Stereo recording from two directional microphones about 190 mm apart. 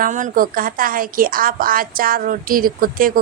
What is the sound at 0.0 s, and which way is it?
A woman's voice, 45° right (ahead or behind).